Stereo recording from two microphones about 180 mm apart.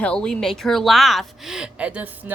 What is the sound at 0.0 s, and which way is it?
Speech, 5° left (ahead or behind).